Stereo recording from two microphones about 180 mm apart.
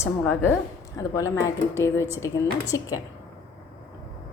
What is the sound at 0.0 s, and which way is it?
A woman's voice, 15° left (ahead or behind).